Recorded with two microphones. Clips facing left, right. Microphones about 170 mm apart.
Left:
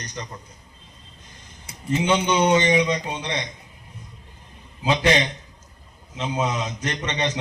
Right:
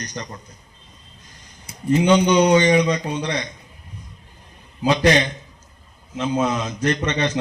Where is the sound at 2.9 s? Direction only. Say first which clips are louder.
Right 3 dB; 20° left (ahead or behind).